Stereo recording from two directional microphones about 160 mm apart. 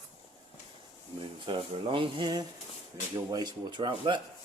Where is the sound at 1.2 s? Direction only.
35° right (ahead or behind).